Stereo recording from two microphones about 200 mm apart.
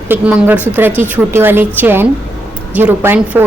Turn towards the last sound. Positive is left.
turn(degrees=-5)  # may be behind; listen again after turning